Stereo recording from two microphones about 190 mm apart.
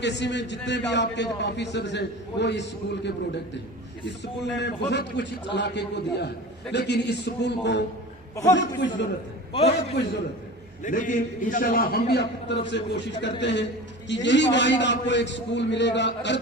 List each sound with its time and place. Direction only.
0.0 s a man's voice: 65° left (ahead or behind)
4.5 s a man's voice: 65° left (ahead or behind)
9.5 s a man's voice: 30° left (ahead or behind)
10.8 s a man's voice: 45° left (ahead or behind); by 16.4 s 65° left (ahead or behind)